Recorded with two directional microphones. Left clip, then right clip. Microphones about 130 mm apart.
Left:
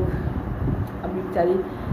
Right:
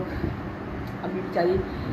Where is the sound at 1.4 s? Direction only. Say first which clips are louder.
Left 3 dB; 5° right (ahead or behind).